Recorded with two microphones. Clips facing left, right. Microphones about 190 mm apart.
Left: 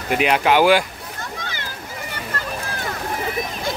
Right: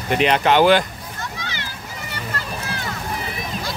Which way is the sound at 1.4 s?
50° left (ahead or behind).